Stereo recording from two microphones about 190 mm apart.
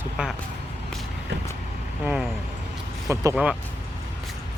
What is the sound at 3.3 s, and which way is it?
Speech, 5° right (ahead or behind).